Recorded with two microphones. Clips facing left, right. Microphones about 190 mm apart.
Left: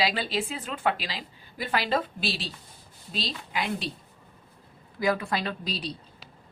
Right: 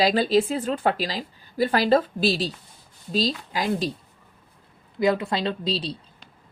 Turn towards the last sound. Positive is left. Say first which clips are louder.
# right 6 dB
turn(degrees=-25)  # may be behind; listen again after turning